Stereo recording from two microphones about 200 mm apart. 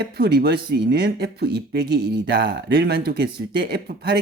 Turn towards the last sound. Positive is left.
turn(degrees=-50)  # may be behind; listen again after turning